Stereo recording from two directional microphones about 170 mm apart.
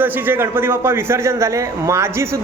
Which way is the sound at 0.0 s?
10° right (ahead or behind).